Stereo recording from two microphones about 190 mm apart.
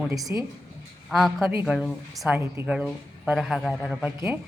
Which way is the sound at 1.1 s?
Centre (ahead or behind).